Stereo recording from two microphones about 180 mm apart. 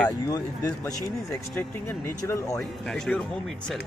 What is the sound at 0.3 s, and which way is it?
Speech, 15° left (ahead or behind).